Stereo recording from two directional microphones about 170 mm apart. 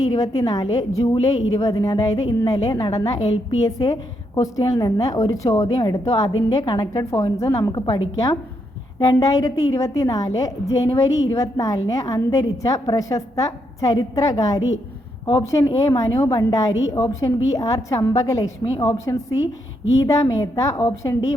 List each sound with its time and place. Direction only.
0.1 s a woman's voice: 20° left (ahead or behind)